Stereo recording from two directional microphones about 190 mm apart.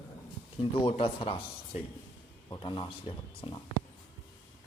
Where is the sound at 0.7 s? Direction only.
30° left (ahead or behind).